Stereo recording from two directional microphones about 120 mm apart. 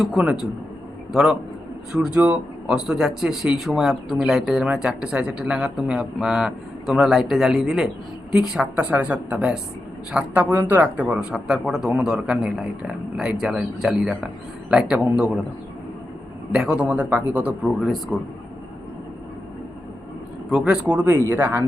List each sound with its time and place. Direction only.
0.0 s speech: centre (ahead or behind)
16.5 s speech: 5° right (ahead or behind)
17.6 s speech: centre (ahead or behind)
20.5 s speech: 5° right (ahead or behind)